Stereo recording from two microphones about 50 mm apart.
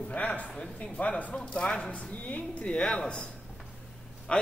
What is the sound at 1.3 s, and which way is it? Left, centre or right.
A man's voice, centre.